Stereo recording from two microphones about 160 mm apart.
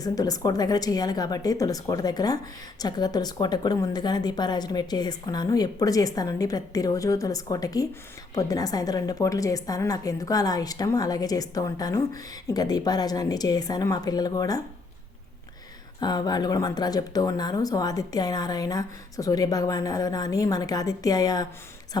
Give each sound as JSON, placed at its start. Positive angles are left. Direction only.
{"t": 0.0, "sound": "a woman's voice", "side_deg": 25}
{"t": 16.0, "sound": "a woman's voice", "side_deg": 25}